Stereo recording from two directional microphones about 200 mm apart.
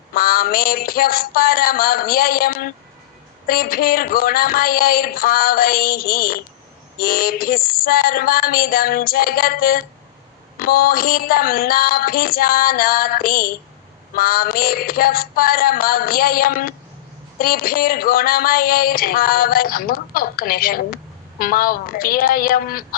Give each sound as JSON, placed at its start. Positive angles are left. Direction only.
{"t": 0.1, "sound": "speech", "side_deg": 45}